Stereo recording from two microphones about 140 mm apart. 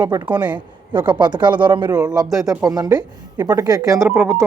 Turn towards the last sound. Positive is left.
turn(degrees=-20)  # may be behind; listen again after turning